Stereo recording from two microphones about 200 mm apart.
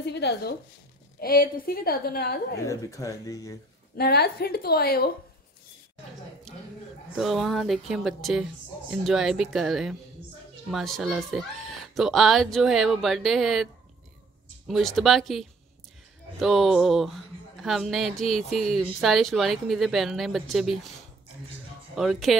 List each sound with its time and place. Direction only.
0.0 s a woman's voice: 60° left (ahead or behind)
2.7 s speech: 15° left (ahead or behind)
3.9 s a woman's voice: 50° left (ahead or behind)
7.2 s speech: centre (ahead or behind)
14.7 s speech: centre (ahead or behind)
21.9 s speech: centre (ahead or behind)